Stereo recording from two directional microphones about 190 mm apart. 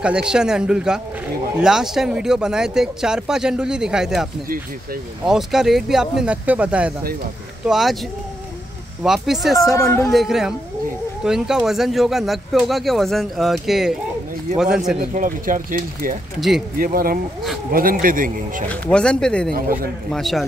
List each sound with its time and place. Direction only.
0.0 s speech: 5° right (ahead or behind)
9.0 s speech: centre (ahead or behind)
9.8 s speech: 15° left (ahead or behind)
10.1 s speech: centre (ahead or behind)
15.0 s speech: 45° right (ahead or behind)
16.3 s speech: centre (ahead or behind)
16.7 s speech: 50° right (ahead or behind)
18.7 s speech: 5° left (ahead or behind)